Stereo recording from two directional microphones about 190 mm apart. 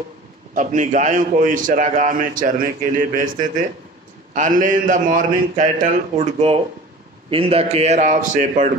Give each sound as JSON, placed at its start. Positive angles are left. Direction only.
{"t": 0.6, "sound": "a man's voice", "side_deg": -40}